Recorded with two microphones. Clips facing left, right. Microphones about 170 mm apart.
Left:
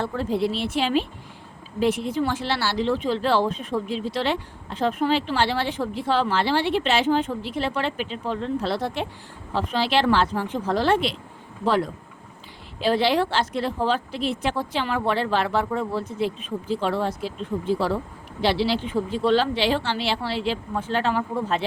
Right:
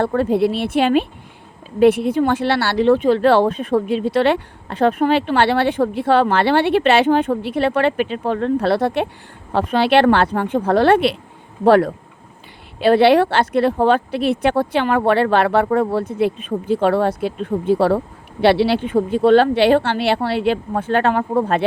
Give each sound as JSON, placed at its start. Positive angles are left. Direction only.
{"t": 0.0, "sound": "speech", "side_deg": -60}